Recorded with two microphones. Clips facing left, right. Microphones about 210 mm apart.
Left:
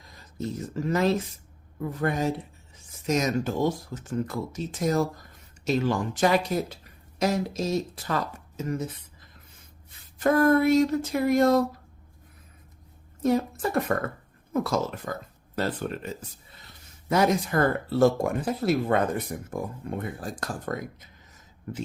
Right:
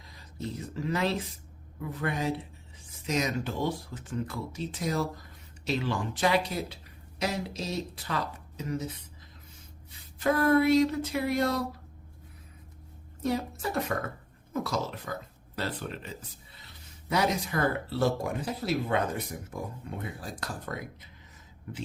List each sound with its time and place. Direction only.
0.0 s speech: 45° left (ahead or behind)
10.2 s speech: 50° left (ahead or behind)
13.2 s speech: 50° left (ahead or behind)
17.1 s speech: 50° left (ahead or behind)